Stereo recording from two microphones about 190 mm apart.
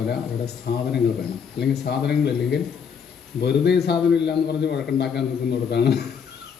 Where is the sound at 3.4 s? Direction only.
60° left (ahead or behind).